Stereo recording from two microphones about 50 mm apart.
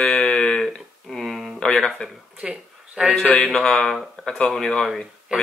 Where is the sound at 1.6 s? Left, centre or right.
Centre.